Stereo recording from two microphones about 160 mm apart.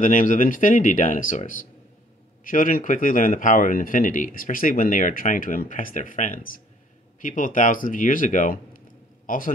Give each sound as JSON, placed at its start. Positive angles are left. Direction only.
{"t": 0.0, "sound": "a man's voice", "side_deg": 55}